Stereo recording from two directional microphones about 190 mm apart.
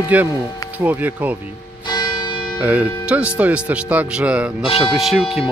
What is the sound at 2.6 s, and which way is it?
Speech, 10° right (ahead or behind).